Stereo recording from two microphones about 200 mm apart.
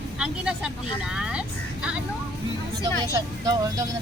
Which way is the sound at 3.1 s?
15° right (ahead or behind).